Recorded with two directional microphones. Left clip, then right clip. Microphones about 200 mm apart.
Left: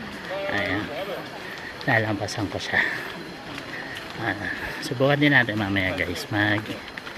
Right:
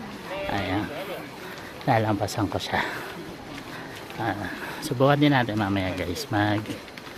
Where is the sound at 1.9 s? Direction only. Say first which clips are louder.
Even; 15° right (ahead or behind).